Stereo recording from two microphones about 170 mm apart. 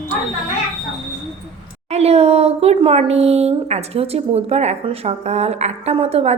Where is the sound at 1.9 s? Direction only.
40° right (ahead or behind).